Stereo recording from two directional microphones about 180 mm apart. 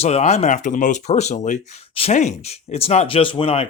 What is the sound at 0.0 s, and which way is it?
Speech, 35° left (ahead or behind).